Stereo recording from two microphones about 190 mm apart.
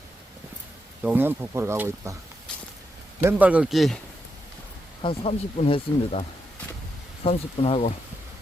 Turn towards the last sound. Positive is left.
turn(degrees=35)  # may be behind; listen again after turning